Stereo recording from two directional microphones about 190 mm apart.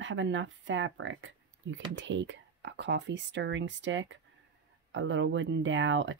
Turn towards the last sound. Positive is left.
turn(degrees=-85)